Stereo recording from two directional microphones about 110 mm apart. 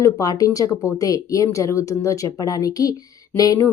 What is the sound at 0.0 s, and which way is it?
Speech, 35° left (ahead or behind).